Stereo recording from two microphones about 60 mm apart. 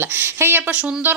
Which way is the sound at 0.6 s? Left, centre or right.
Right.